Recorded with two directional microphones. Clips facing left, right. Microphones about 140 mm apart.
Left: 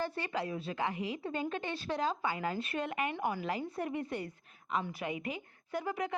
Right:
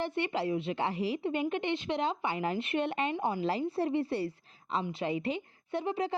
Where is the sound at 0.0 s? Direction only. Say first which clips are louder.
Right 4 dB; 25° right (ahead or behind).